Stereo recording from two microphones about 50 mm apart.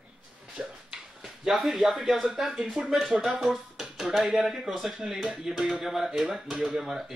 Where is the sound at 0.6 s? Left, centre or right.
Right.